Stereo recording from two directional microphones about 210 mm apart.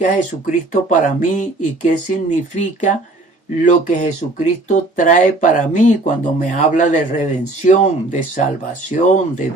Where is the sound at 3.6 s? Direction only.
35° left (ahead or behind).